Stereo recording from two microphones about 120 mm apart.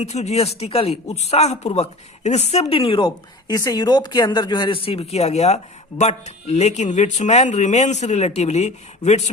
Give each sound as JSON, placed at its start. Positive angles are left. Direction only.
{"t": 0.0, "sound": "speech", "side_deg": 70}